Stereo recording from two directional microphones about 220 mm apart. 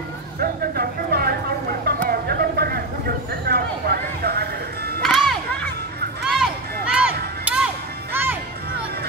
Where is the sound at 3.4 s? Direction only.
45° right (ahead or behind).